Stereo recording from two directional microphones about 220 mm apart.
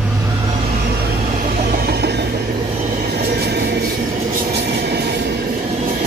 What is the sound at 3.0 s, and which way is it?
Train, 45° right (ahead or behind).